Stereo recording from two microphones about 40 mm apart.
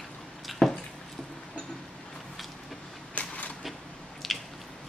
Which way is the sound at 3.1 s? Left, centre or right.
Left.